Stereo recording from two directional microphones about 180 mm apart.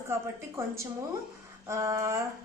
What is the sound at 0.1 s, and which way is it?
A woman's voice, 15° right (ahead or behind).